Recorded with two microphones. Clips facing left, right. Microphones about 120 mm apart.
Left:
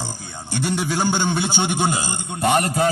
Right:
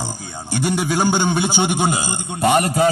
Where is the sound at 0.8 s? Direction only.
50° right (ahead or behind).